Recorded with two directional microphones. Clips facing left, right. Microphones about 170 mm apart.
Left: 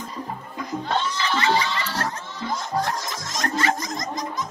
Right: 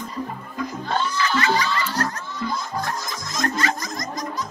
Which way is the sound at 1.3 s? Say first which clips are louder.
Left 1 dB; 25° left (ahead or behind).